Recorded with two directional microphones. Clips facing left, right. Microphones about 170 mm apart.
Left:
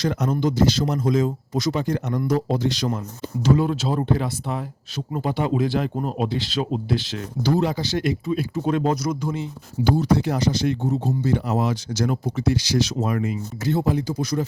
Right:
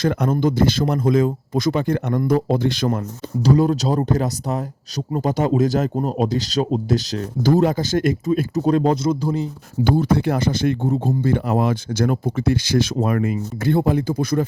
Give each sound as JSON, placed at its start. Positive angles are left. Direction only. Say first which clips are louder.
{"t": 0.0, "sound": "speech", "louder": "right 3 dB", "side_deg": -55}
{"t": 3.4, "sound": "speech", "louder": "right 3 dB", "side_deg": -40}
{"t": 9.8, "sound": "speech", "louder": "right 2 dB", "side_deg": -55}